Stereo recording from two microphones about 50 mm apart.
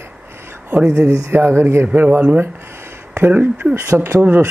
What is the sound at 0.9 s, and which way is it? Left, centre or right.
Speech, right.